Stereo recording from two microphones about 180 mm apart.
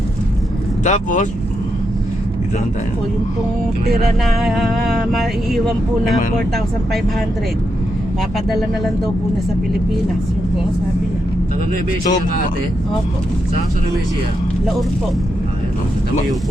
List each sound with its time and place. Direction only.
0.9 s speech: 45° left (ahead or behind)
4.2 s vehicle: centre (ahead or behind)